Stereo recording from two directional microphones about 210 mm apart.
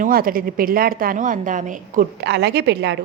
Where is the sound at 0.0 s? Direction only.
45° right (ahead or behind).